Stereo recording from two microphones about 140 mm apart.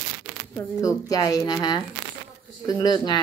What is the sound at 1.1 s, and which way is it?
A woman's voice, 25° left (ahead or behind).